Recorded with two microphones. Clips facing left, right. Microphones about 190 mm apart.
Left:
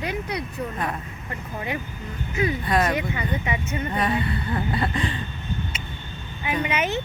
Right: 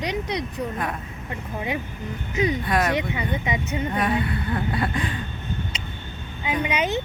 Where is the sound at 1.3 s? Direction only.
15° right (ahead or behind).